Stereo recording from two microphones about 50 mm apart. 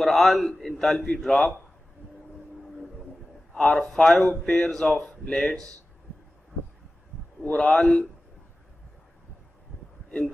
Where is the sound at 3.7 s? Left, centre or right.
Centre.